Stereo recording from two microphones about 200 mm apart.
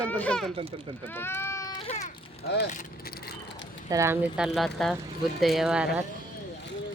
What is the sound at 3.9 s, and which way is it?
Speech, 15° right (ahead or behind).